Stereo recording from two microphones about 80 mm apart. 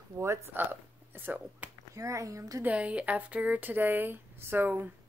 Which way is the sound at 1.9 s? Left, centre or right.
Right.